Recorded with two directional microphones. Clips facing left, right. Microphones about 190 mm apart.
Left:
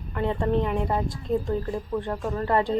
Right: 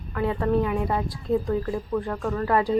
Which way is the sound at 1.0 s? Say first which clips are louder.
Right 2 dB; 20° left (ahead or behind).